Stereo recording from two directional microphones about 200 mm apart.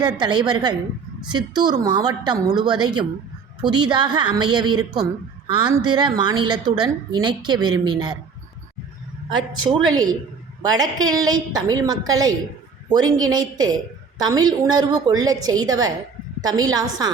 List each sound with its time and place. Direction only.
0.2 s a woman's voice: 20° right (ahead or behind)
9.5 s a woman's voice: 25° right (ahead or behind)